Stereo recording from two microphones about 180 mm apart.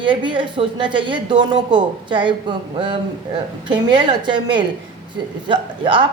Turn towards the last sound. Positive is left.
turn(degrees=-30)  # may be behind; listen again after turning